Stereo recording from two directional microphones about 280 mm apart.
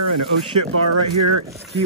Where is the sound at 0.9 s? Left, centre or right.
Right.